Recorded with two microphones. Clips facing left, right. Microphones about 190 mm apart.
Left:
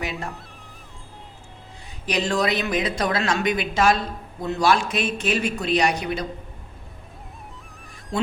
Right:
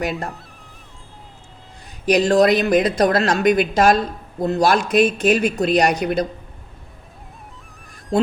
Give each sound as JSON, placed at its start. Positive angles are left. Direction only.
{"t": 0.0, "sound": "a woman's voice", "side_deg": -40}
{"t": 2.0, "sound": "a woman's voice", "side_deg": -40}